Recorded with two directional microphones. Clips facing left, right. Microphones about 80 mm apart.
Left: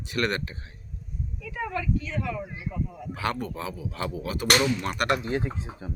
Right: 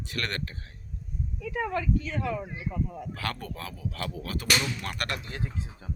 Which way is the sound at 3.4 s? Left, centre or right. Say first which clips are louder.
Left 4 dB; centre.